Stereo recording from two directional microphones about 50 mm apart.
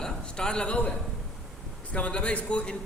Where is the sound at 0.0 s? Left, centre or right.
Centre.